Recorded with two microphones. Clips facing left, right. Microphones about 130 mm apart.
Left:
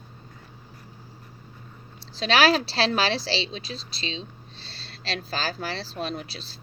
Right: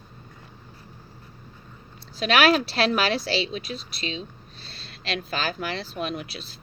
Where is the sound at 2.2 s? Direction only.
30° left (ahead or behind).